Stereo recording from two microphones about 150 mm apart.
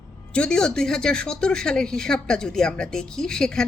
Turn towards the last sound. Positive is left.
turn(degrees=5)  # may be behind; listen again after turning